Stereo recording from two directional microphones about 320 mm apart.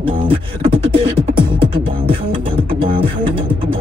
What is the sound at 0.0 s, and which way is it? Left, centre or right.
Beatboxing, centre.